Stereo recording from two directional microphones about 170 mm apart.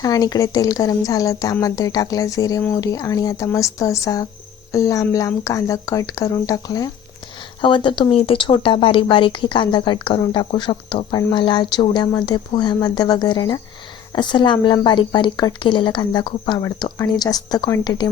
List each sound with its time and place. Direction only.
0.0 s speech: 20° left (ahead or behind)